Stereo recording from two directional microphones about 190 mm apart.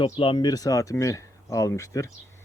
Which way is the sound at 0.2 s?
25° left (ahead or behind).